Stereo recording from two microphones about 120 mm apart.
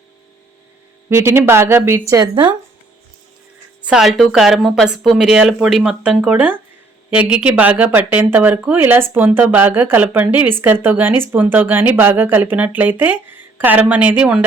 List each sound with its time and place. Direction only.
1.1 s speech: 20° right (ahead or behind)
2.3 s speech: 40° right (ahead or behind)
3.8 s speech: 5° right (ahead or behind)